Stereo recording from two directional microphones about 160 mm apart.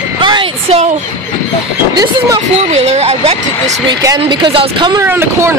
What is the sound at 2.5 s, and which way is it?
A woman's voice, 40° right (ahead or behind).